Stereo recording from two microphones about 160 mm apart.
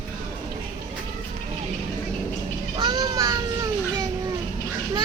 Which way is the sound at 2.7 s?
30° right (ahead or behind).